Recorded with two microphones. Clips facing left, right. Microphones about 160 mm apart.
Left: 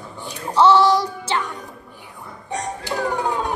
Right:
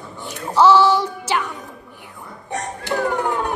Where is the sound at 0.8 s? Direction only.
Centre (ahead or behind).